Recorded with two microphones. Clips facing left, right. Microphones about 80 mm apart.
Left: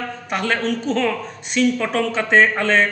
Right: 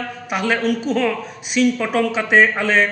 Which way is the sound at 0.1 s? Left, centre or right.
Centre.